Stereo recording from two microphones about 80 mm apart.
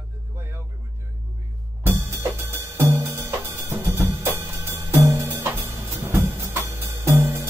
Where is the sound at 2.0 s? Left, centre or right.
Right.